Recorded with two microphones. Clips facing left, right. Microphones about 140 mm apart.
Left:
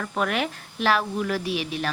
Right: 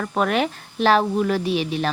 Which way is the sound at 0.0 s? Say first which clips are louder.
Right 5 dB; 40° right (ahead or behind).